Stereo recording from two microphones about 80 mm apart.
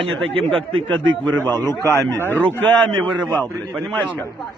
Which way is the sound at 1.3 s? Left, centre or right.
Left.